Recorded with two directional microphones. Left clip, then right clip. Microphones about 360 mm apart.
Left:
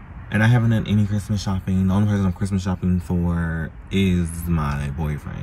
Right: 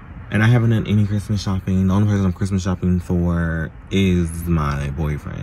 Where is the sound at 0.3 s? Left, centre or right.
Centre.